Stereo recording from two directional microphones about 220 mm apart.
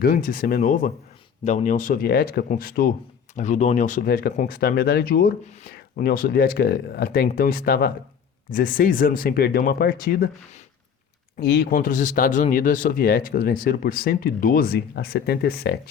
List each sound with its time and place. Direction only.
0.0 s speech: 40° left (ahead or behind)
11.3 s speech: 45° left (ahead or behind)